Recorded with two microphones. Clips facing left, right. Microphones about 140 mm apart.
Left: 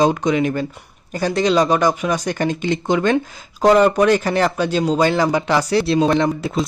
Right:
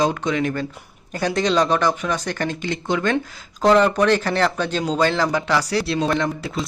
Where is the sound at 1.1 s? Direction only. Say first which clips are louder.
Left 3 dB; 5° left (ahead or behind).